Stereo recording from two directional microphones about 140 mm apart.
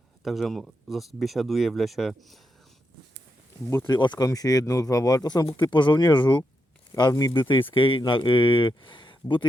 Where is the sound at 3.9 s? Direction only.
30° left (ahead or behind).